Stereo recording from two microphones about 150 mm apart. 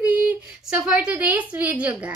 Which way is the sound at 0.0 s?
10° right (ahead or behind).